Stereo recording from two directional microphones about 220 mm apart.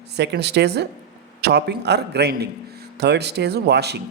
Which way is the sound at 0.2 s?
50° right (ahead or behind).